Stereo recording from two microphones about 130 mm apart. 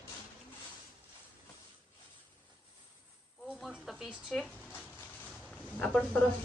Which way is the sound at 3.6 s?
Centre (ahead or behind).